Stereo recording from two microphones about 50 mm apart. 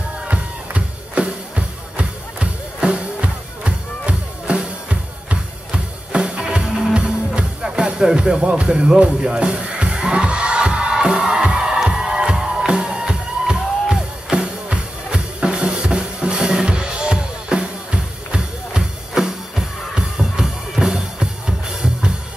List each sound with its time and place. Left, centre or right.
0.3 s music: right